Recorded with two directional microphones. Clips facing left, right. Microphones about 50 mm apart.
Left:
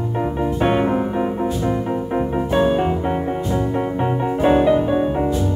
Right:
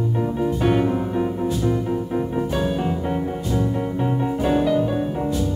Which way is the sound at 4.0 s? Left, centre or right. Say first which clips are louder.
Left 4 dB; left.